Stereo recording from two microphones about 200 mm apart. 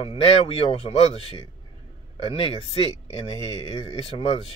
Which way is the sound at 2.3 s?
30° left (ahead or behind).